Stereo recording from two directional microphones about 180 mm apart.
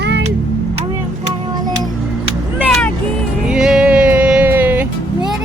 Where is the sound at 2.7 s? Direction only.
5° left (ahead or behind).